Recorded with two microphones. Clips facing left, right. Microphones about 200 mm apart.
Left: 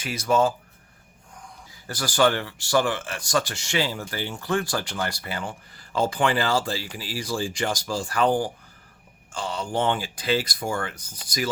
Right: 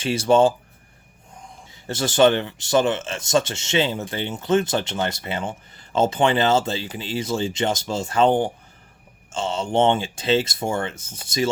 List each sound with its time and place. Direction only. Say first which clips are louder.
0.0 s speech: right 5 dB; 30° right (ahead or behind)